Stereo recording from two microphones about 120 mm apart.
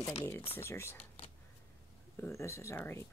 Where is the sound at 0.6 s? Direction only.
20° left (ahead or behind).